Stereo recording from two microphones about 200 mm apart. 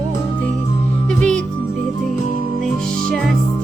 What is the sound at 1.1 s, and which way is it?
Music, 5° left (ahead or behind).